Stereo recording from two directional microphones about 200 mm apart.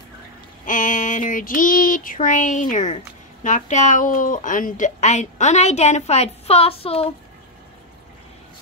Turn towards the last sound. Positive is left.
turn(degrees=30)  # may be behind; listen again after turning